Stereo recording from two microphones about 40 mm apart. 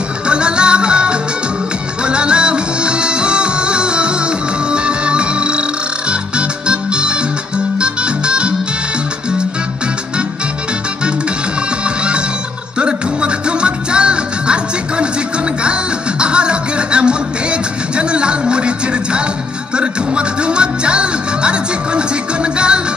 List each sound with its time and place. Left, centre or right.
0.3 s music: right
11.8 s music: right
19.7 s music: right